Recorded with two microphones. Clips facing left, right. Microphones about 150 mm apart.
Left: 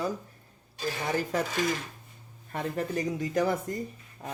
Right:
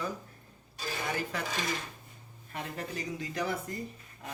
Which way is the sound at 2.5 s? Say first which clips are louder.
Left 7 dB; 50° left (ahead or behind).